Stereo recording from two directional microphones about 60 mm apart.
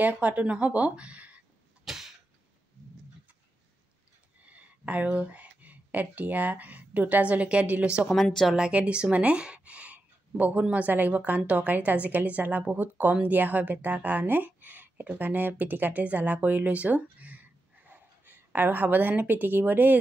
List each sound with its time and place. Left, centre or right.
0.0 s speech: right
1.9 s a sound: centre
4.5 s speech: right
8.1 s speech: centre
8.5 s a woman's voice: centre